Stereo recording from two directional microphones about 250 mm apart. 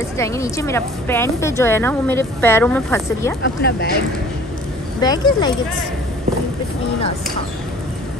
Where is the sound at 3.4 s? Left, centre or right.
Left.